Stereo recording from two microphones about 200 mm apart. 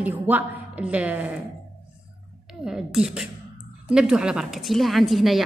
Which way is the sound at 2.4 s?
Centre (ahead or behind).